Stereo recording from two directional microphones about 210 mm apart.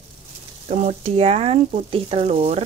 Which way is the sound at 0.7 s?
30° right (ahead or behind).